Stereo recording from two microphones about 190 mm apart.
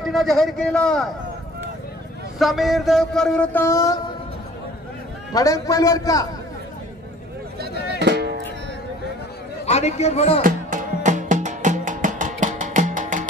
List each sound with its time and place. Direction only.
0.0 s speech: centre (ahead or behind)
2.3 s speech: centre (ahead or behind); by 4.0 s 15° left (ahead or behind)
5.3 s a man's voice: 15° left (ahead or behind)
8.0 s music: 60° right (ahead or behind)
9.7 s a man's voice: 35° left (ahead or behind)
10.4 s music: 40° right (ahead or behind)